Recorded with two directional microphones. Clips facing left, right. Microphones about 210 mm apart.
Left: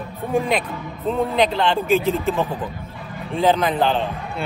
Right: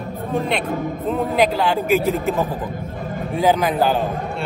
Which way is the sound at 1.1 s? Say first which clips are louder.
Even; centre (ahead or behind).